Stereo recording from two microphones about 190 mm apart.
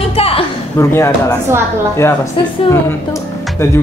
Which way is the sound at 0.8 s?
15° left (ahead or behind).